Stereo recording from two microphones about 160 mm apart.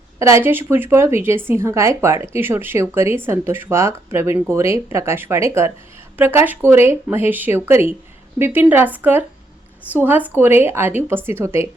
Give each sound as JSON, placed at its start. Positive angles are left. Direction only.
{"t": 0.2, "sound": "speech", "side_deg": -15}